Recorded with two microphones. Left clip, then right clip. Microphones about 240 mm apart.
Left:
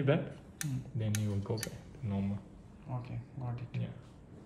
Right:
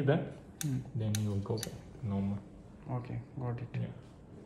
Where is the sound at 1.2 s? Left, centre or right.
Left.